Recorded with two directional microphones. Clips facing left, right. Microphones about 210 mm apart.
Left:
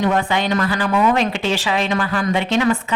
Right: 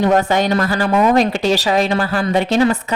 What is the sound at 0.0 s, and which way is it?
A woman's voice, 40° right (ahead or behind).